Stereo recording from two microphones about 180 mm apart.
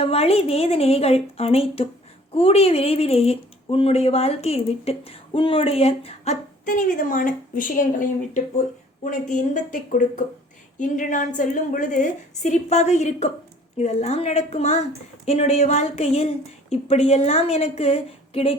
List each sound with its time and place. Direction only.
0.0 s speech: 35° left (ahead or behind)